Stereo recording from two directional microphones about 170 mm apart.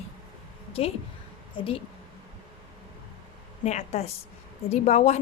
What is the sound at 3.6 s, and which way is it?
A woman's voice, 40° left (ahead or behind).